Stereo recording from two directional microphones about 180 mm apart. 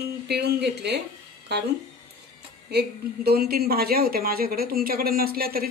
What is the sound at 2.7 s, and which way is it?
A woman's voice, 60° right (ahead or behind).